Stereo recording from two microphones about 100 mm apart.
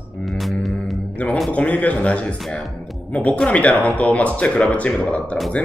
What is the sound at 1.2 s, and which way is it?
Speech, 15° left (ahead or behind).